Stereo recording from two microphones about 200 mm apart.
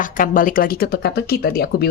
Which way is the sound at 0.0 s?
45° left (ahead or behind).